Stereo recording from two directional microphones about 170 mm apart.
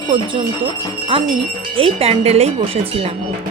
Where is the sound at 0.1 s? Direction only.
30° right (ahead or behind).